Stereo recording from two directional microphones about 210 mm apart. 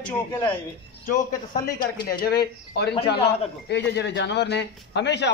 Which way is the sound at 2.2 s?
50° left (ahead or behind).